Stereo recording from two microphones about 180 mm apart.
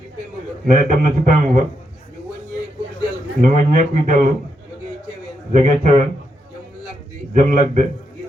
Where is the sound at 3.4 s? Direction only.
45° right (ahead or behind).